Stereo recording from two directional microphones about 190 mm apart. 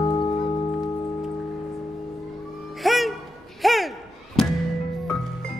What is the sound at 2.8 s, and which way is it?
Music, centre (ahead or behind).